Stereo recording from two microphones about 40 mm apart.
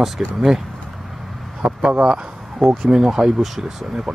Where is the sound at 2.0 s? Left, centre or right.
Right.